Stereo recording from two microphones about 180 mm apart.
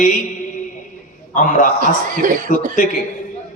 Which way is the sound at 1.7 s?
45° right (ahead or behind).